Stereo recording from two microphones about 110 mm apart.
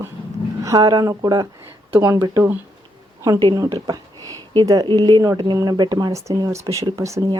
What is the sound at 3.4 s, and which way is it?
Speech, 40° right (ahead or behind).